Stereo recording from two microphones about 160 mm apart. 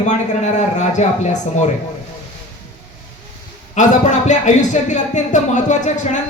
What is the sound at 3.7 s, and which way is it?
Speech, 50° left (ahead or behind).